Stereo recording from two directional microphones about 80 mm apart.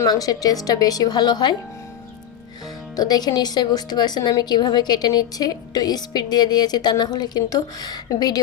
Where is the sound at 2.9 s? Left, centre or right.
Left.